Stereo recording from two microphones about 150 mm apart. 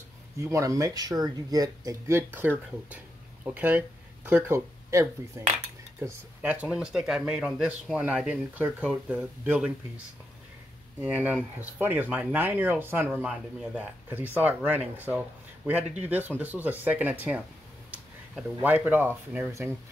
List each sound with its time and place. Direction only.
0.4 s speech: 20° right (ahead or behind)
11.0 s speech: 10° right (ahead or behind)
18.6 s speech: 10° right (ahead or behind)